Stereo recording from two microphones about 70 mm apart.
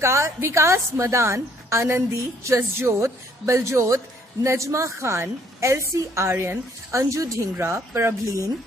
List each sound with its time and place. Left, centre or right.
0.0 s a woman's voice: right
7.5 s speech: right